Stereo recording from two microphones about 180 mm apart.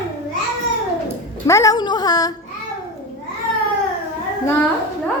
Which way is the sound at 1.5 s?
15° left (ahead or behind).